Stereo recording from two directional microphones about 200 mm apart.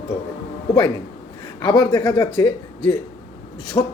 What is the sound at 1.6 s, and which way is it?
Speech, 20° left (ahead or behind).